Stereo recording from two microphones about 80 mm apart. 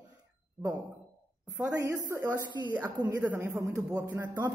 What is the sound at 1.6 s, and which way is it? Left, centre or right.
Speech, right.